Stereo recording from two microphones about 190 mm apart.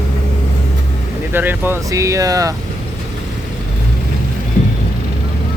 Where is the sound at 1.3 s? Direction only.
10° right (ahead or behind).